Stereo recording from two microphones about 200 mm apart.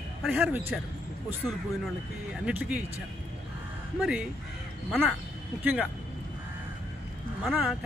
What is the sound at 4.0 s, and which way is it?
Speech, 5° right (ahead or behind).